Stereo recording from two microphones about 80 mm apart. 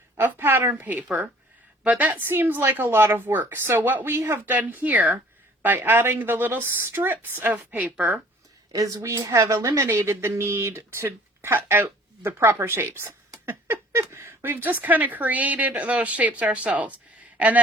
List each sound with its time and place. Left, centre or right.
0.2 s speech: right
1.0 s speech: centre; by 4.5 s right
4.5 s speech: right
8.7 s a woman's voice: right; by 17.6 s centre